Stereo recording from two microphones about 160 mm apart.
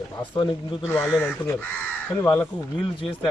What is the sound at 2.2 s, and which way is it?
Speech, 15° left (ahead or behind).